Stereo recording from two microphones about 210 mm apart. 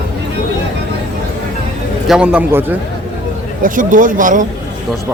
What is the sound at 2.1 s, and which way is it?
Speech, 5° right (ahead or behind).